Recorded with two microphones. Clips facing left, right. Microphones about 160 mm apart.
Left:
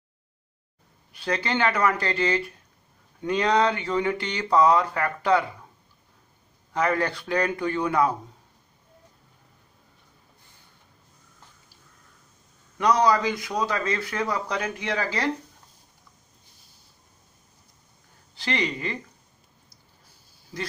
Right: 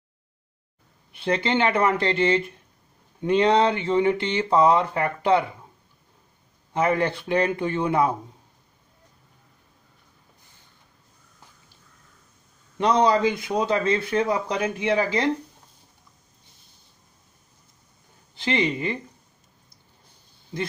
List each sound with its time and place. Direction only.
1.1 s speech: 25° right (ahead or behind)
6.7 s speech: 20° right (ahead or behind)
12.7 s speech: 25° right (ahead or behind)
18.3 s speech: 20° right (ahead or behind)
20.5 s speech: 25° right (ahead or behind)